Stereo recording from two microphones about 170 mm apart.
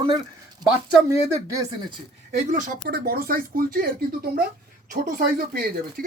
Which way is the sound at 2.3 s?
50° right (ahead or behind).